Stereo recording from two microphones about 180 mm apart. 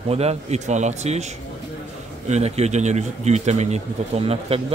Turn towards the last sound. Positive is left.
turn(degrees=-35)  # may be behind; listen again after turning